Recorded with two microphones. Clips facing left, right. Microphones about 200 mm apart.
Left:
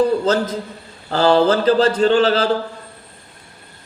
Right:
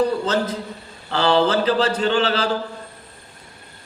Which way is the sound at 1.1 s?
40° left (ahead or behind).